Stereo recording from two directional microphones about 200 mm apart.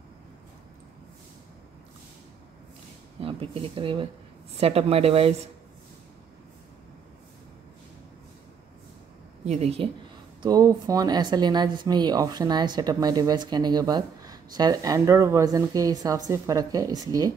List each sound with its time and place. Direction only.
3.2 s speech: 30° right (ahead or behind)
9.4 s speech: 30° right (ahead or behind)
10.4 s speech: 20° right (ahead or behind)